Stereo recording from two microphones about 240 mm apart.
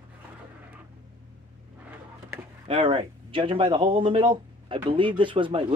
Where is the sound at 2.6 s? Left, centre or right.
Right.